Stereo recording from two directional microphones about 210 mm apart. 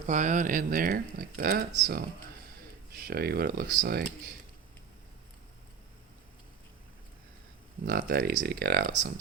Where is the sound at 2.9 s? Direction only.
45° right (ahead or behind).